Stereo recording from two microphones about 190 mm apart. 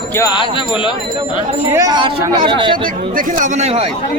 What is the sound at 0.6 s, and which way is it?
Speech, 25° left (ahead or behind).